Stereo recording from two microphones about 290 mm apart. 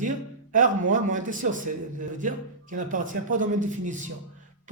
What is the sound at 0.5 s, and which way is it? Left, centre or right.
A man's voice, right.